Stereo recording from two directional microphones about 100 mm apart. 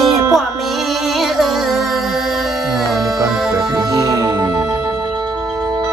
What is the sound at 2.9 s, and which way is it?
Music, 5° right (ahead or behind).